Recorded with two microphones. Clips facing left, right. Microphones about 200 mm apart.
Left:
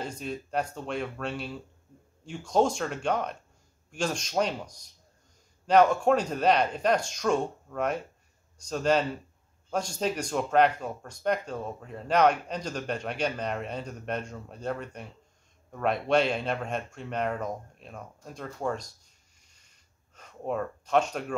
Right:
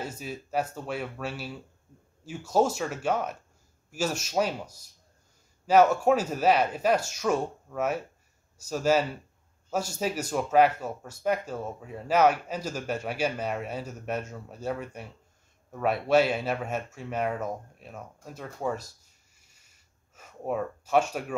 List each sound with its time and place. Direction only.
0.0 s speech: 5° right (ahead or behind)